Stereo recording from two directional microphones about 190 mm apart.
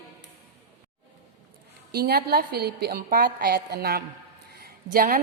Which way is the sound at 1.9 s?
55° right (ahead or behind).